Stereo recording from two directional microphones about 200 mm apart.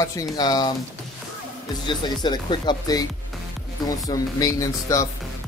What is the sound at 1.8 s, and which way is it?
Speech, 25° left (ahead or behind).